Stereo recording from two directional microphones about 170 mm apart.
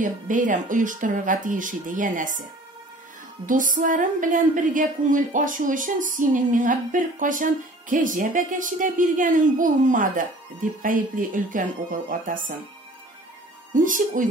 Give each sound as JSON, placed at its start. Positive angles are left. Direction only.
{"t": 0.0, "sound": "a woman's voice", "side_deg": -50}
{"t": 3.4, "sound": "a woman's voice", "side_deg": -50}
{"t": 13.7, "sound": "a woman's voice", "side_deg": -50}